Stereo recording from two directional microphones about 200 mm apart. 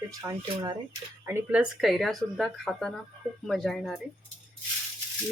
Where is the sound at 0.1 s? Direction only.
20° right (ahead or behind); by 3.9 s centre (ahead or behind).